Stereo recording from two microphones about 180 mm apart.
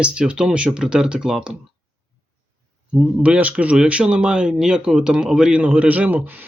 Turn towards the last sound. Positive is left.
turn(degrees=-10)  # may be behind; listen again after turning